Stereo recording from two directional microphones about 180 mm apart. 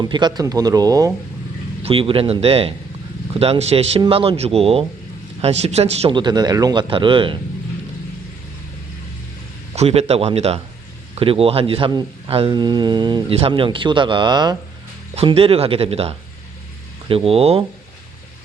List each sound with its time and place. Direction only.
0.0 s speech: 25° right (ahead or behind)
1.8 s speech: 30° right (ahead or behind)
9.7 s speech: 35° right (ahead or behind)